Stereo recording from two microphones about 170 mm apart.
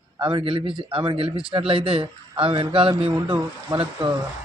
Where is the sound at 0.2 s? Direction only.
30° right (ahead or behind).